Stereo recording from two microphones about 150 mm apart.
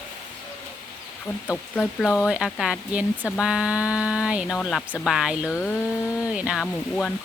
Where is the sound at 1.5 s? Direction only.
10° left (ahead or behind).